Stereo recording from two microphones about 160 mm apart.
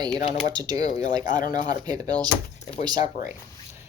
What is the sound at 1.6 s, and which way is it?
Speech, 25° right (ahead or behind).